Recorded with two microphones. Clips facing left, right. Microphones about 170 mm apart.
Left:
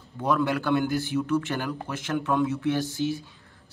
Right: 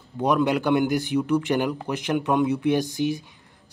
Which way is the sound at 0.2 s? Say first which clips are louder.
Right 4 dB; 20° right (ahead or behind).